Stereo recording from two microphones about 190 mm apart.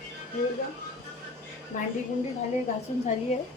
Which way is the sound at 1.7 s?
45° left (ahead or behind).